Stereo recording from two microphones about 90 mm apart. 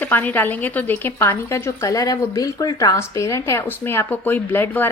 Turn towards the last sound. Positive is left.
turn(degrees=25)  # may be behind; listen again after turning